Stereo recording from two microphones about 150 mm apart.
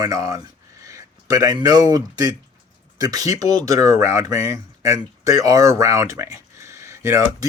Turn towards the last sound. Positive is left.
turn(degrees=-20)  # may be behind; listen again after turning